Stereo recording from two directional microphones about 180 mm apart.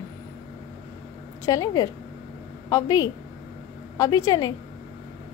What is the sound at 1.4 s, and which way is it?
Speech, 20° left (ahead or behind).